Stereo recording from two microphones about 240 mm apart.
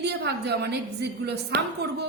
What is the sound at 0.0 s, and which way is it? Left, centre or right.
A woman's voice, right.